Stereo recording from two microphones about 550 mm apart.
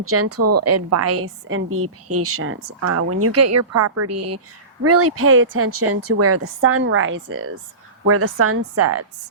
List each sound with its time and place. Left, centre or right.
0.0 s a woman's voice: right